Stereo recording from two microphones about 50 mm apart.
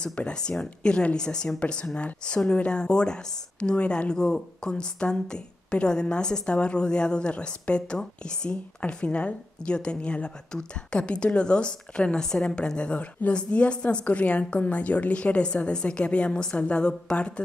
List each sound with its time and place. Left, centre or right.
0.3 s a woman's voice: centre
4.1 s a woman's voice: centre